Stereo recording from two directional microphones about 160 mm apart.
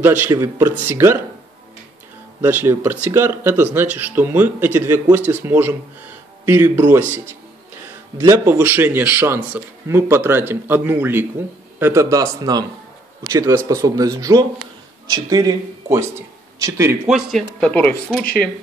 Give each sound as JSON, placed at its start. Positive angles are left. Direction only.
{"t": 0.0, "sound": "a man's voice", "side_deg": -15}
{"t": 2.4, "sound": "a man's voice", "side_deg": -15}
{"t": 8.2, "sound": "a man's voice", "side_deg": -15}
{"t": 17.1, "sound": "speech", "side_deg": 0}